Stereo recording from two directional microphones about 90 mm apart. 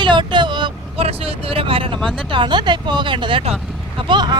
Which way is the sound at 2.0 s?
65° right (ahead or behind).